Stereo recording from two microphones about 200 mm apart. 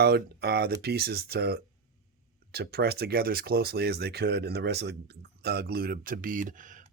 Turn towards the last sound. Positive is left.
turn(degrees=-40)  # may be behind; listen again after turning